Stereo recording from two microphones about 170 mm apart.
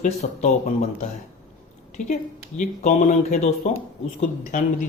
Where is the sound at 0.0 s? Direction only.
40° left (ahead or behind).